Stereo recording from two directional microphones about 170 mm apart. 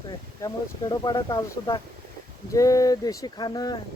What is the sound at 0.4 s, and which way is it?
Speech, 20° left (ahead or behind).